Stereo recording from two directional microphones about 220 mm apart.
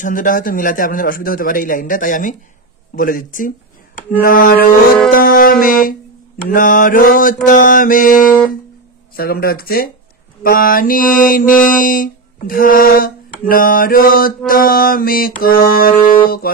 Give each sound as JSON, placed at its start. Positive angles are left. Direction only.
{"t": 0.0, "sound": "mantra", "side_deg": 40}
{"t": 5.1, "sound": "a sound", "side_deg": 40}
{"t": 7.4, "sound": "mantra", "side_deg": 40}
{"t": 9.1, "sound": "speech", "side_deg": 45}
{"t": 10.4, "sound": "mantra", "side_deg": 40}